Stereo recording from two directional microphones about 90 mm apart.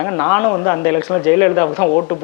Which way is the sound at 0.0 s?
25° left (ahead or behind).